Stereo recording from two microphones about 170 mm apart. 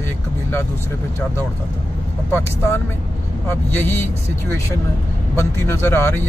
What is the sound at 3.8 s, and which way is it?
Speech, 15° left (ahead or behind).